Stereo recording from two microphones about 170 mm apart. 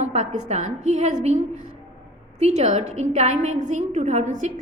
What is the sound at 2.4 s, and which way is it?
A woman's voice, 40° right (ahead or behind).